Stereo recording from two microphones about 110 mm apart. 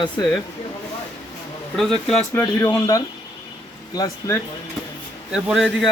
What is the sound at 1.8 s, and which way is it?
Speech, 5° left (ahead or behind).